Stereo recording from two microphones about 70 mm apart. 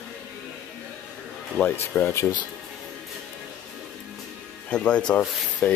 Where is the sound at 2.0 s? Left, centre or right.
Left.